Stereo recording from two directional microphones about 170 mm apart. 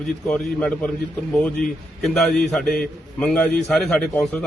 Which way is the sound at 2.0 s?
Centre (ahead or behind).